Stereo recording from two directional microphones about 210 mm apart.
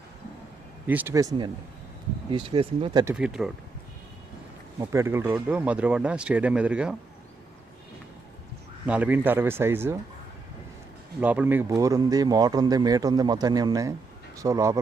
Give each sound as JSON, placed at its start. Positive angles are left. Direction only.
{"t": 0.9, "sound": "speech", "side_deg": -10}
{"t": 3.0, "sound": "speech", "side_deg": -10}
{"t": 4.8, "sound": "speech", "side_deg": -15}
{"t": 8.9, "sound": "speech", "side_deg": -5}
{"t": 11.2, "sound": "speech", "side_deg": -5}